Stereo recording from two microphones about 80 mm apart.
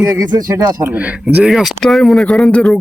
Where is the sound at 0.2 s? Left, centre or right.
Right.